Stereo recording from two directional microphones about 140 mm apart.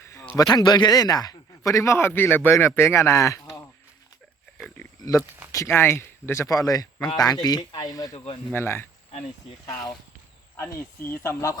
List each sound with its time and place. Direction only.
0.0 s a sound: 20° left (ahead or behind)
0.5 s speech: 30° left (ahead or behind)
5.0 s speech: 25° left (ahead or behind)
8.1 s speech: 50° left (ahead or behind)
8.5 s speech: 15° left (ahead or behind)